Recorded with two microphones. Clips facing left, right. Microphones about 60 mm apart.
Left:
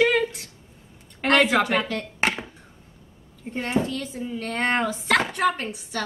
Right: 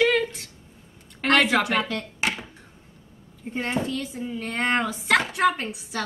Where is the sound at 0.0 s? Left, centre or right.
Centre.